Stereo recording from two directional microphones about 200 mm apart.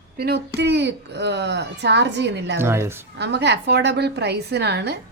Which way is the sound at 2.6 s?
10° right (ahead or behind).